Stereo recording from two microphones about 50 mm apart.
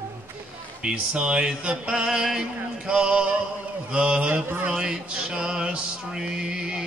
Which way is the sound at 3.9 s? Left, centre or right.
Right.